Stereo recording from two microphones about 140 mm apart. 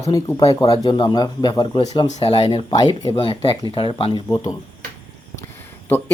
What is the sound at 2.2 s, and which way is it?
Speech, 45° left (ahead or behind).